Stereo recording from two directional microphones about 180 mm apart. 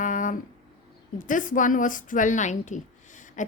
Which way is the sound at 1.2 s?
45° left (ahead or behind).